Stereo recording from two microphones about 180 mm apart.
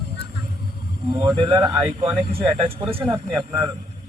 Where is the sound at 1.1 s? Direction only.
25° right (ahead or behind).